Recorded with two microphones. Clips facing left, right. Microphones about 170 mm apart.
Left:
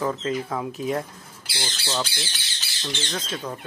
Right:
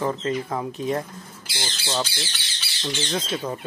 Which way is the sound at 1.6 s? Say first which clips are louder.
Right 1 dB; 20° right (ahead or behind).